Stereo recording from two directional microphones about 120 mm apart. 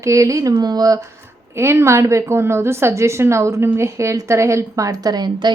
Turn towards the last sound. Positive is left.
turn(degrees=-35)  # may be behind; listen again after turning